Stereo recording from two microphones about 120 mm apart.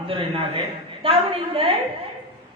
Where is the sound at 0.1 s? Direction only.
50° right (ahead or behind).